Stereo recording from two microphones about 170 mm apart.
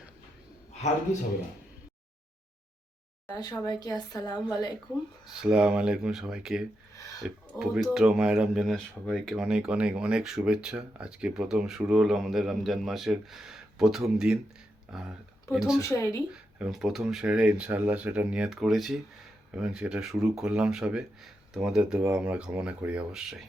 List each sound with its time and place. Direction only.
0.7 s a sound: 40° left (ahead or behind)
3.2 s a woman's voice: 25° left (ahead or behind)
5.2 s speech: 5° right (ahead or behind)